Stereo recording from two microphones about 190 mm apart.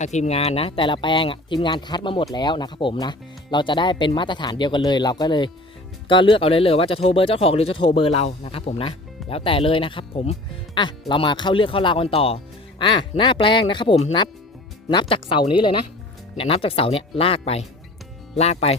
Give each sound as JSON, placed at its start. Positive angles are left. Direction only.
{"t": 0.0, "sound": "speech", "side_deg": 35}